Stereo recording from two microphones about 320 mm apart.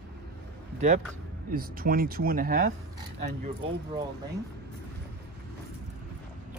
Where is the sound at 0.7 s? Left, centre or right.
Right.